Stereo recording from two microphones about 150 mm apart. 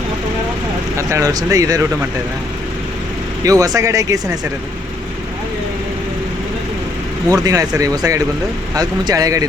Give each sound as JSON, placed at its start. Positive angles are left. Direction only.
{"t": 0.9, "sound": "speech", "side_deg": -20}
{"t": 3.4, "sound": "speech", "side_deg": -25}
{"t": 7.4, "sound": "speech", "side_deg": -25}